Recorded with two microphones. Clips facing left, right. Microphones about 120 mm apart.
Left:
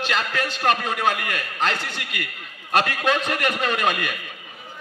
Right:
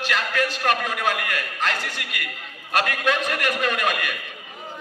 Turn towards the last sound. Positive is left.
turn(degrees=30)  # may be behind; listen again after turning